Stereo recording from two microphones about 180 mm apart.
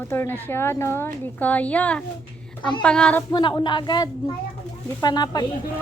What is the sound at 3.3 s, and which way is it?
Speech, 25° left (ahead or behind).